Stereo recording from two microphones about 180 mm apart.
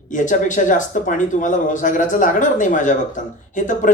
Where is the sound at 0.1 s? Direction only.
45° left (ahead or behind).